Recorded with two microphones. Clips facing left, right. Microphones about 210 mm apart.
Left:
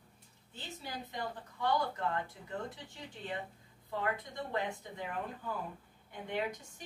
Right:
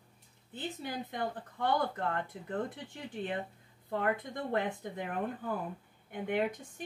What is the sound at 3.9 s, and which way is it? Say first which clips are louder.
A woman's voice: right 4 dB; 55° right (ahead or behind).